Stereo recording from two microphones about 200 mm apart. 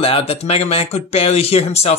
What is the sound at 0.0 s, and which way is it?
Speech, 30° left (ahead or behind).